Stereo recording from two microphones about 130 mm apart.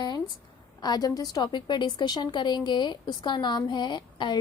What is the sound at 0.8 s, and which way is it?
A woman's voice, 30° left (ahead or behind).